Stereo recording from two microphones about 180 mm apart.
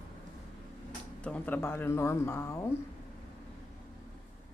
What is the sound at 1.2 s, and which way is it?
Speech, 10° left (ahead or behind).